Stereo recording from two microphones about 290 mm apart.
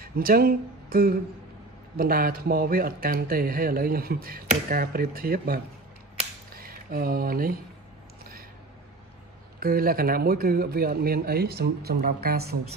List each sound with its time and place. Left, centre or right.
0.0 s a man's voice: right
6.1 s finger snapping: right
9.6 s a man's voice: right